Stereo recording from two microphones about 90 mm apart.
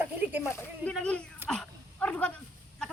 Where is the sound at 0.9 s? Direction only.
10° left (ahead or behind).